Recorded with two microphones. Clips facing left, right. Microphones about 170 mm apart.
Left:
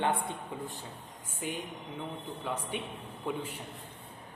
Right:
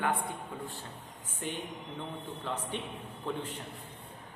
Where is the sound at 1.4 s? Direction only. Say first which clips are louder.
Left 1 dB; 5° left (ahead or behind).